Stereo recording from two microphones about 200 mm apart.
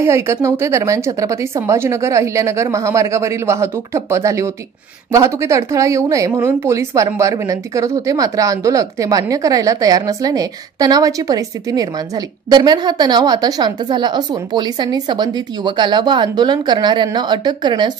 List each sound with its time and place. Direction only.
0.0 s a woman's voice: 15° right (ahead or behind)